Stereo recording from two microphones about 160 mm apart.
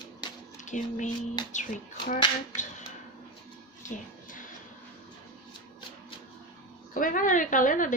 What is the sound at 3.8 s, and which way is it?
Music, 55° left (ahead or behind).